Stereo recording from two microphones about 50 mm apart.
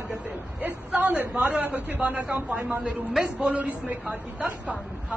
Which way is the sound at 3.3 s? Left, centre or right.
Right.